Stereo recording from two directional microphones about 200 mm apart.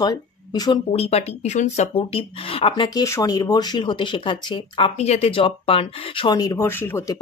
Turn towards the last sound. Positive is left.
turn(degrees=10)  # may be behind; listen again after turning